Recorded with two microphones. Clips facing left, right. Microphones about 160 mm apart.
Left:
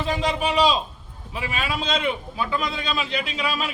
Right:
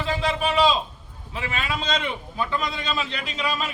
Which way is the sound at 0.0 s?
15° left (ahead or behind).